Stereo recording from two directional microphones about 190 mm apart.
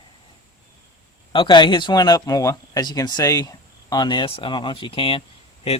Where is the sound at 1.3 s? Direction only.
25° left (ahead or behind).